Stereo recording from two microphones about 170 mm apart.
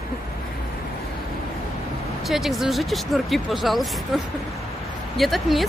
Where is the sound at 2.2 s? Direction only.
Centre (ahead or behind).